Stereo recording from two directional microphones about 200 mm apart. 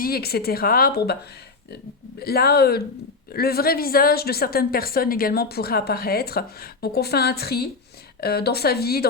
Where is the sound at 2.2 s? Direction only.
50° left (ahead or behind).